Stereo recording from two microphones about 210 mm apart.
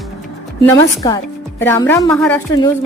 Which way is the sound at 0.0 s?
Centre (ahead or behind).